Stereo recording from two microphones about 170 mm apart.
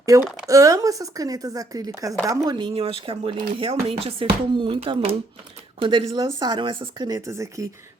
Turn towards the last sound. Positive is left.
turn(degrees=-20)  # may be behind; listen again after turning